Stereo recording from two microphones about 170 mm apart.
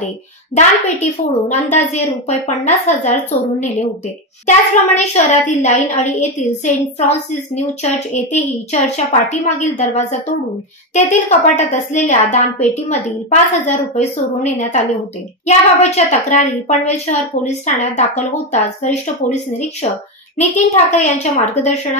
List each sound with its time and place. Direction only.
0.6 s speech: 45° left (ahead or behind)